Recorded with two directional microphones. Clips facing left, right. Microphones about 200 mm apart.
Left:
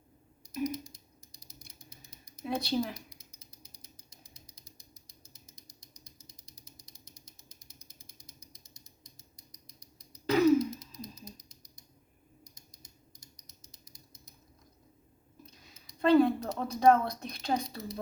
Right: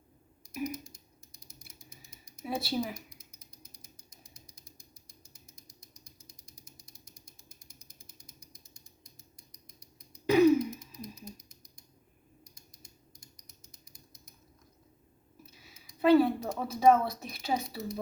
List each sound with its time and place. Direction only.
0.6 s typing: 35° left (ahead or behind)
2.4 s speech: 5° right (ahead or behind)
2.9 s mechanisms: 30° left (ahead or behind)
10.2 s throat clearing: 10° right (ahead or behind)
15.4 s a sound: 5° right (ahead or behind)